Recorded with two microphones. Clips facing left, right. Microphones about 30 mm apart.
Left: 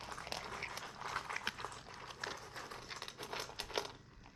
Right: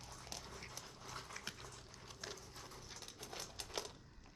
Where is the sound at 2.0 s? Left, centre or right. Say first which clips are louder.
Left 6 dB; left.